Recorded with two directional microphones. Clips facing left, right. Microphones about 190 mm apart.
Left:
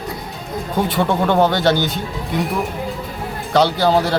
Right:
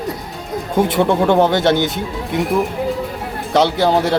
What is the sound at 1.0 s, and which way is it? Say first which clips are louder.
Speech: right 2 dB; 20° right (ahead or behind).